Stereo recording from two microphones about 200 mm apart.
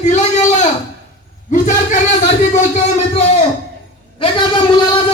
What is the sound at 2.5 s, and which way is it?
Speech, 35° left (ahead or behind).